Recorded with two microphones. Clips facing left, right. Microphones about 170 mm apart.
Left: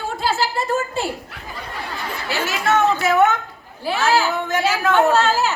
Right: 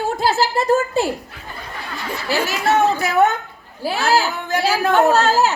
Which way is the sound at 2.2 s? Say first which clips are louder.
Right 2 dB; 35° right (ahead or behind).